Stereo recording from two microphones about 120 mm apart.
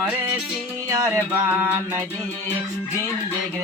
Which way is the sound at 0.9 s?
25° right (ahead or behind).